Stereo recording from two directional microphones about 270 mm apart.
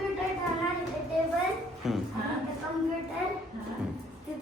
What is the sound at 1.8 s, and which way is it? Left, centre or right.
Music, centre.